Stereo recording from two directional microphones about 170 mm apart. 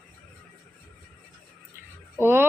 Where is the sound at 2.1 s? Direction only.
15° right (ahead or behind).